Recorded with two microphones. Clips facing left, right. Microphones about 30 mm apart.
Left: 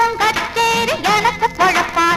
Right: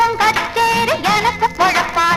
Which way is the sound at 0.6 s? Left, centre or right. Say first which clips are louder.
Right 1 dB; left.